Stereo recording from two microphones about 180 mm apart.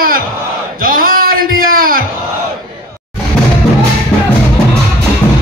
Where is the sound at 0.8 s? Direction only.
50° right (ahead or behind).